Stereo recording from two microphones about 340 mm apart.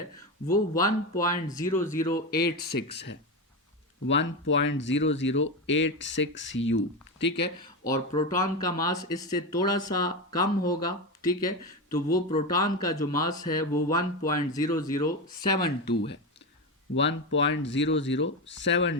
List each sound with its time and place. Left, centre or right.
0.4 s speech: centre
2.4 s speech: left
7.6 s speech: centre
15.8 s speech: left